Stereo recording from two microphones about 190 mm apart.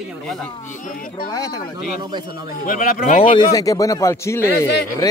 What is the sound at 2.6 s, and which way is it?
Speech, 45° left (ahead or behind).